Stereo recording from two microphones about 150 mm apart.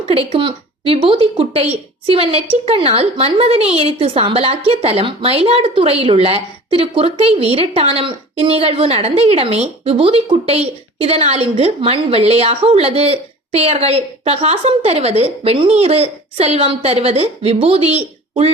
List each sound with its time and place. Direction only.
0.0 s a woman's voice: 40° right (ahead or behind)